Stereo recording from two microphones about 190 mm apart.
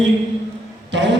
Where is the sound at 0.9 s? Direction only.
65° right (ahead or behind).